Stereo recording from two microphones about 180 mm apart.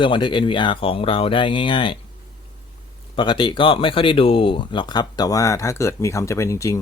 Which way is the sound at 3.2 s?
25° left (ahead or behind).